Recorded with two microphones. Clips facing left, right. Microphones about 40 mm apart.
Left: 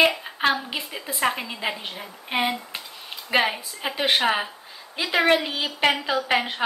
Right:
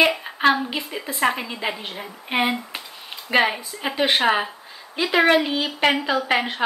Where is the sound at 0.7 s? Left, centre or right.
Centre.